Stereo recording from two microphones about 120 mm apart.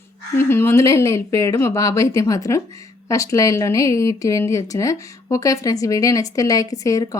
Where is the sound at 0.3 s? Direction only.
20° left (ahead or behind).